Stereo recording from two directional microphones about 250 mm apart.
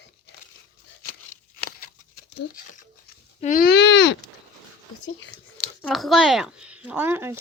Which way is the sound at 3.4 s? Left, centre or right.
Left.